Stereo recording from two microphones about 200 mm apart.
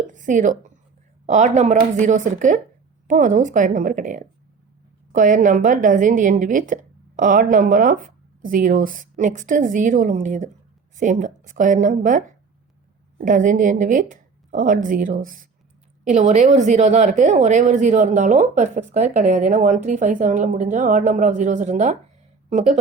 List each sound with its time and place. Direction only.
0.1 s a woman's voice: 40° right (ahead or behind)
13.2 s a woman's voice: 40° right (ahead or behind)